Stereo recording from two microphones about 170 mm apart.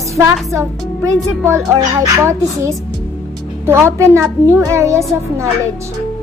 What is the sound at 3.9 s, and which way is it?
Speech, 15° right (ahead or behind).